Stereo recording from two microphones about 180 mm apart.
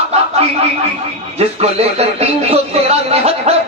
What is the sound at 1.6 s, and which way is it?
Speech, 35° right (ahead or behind).